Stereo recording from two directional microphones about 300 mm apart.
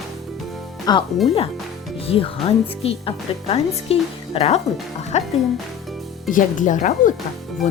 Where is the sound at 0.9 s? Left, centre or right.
Centre.